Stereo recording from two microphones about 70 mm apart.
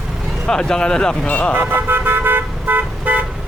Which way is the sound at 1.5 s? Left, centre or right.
Right.